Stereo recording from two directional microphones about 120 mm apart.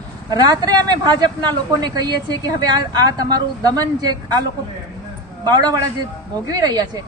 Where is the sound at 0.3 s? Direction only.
30° right (ahead or behind).